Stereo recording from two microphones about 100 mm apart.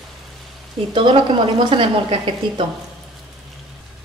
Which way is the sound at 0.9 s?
60° right (ahead or behind).